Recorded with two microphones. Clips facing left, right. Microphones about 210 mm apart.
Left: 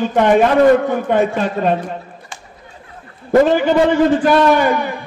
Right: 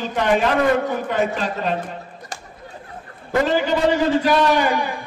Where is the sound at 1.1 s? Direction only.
50° left (ahead or behind).